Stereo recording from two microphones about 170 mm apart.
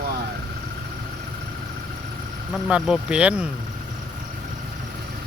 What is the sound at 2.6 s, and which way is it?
Speech, 5° right (ahead or behind).